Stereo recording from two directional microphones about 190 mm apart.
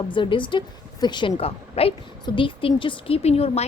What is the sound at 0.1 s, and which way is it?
A woman's voice, 25° left (ahead or behind).